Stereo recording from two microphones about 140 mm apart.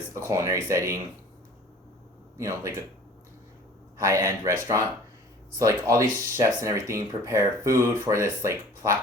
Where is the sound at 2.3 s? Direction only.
20° right (ahead or behind).